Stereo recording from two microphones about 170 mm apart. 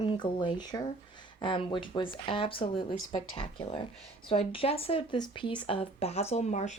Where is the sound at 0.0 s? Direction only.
30° left (ahead or behind).